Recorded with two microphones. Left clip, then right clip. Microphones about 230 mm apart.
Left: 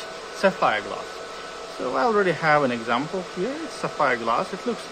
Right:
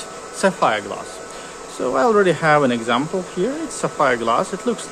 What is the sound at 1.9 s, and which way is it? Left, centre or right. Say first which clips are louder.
Speech: right 6 dB; centre.